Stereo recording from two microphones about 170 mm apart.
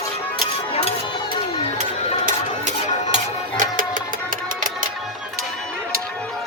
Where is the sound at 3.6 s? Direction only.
50° right (ahead or behind).